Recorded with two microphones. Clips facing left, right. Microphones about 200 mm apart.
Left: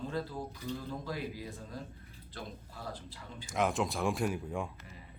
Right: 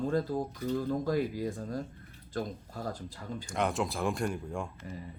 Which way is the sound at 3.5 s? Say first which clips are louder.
Even; centre (ahead or behind).